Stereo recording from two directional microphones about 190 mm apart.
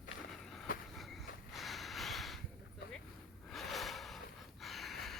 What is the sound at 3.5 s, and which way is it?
Snort, centre (ahead or behind).